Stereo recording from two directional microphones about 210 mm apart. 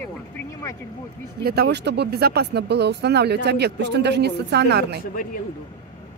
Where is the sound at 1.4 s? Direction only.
50° right (ahead or behind).